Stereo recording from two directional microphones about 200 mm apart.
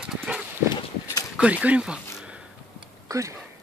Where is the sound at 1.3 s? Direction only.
5° right (ahead or behind).